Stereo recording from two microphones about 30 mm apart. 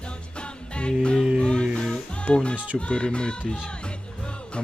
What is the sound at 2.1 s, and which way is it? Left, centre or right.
Music, left.